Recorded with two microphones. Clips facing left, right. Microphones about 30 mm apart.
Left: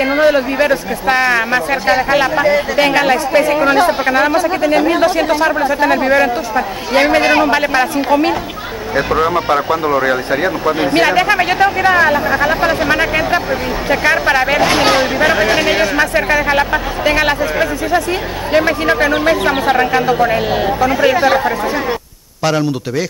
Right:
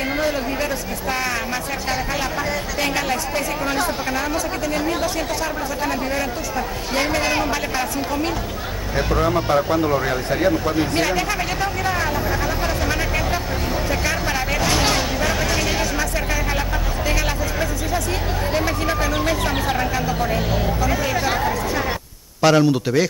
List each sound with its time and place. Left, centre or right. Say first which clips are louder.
0.0 s speech: left 10 dB; left
22.4 s speech: even; centre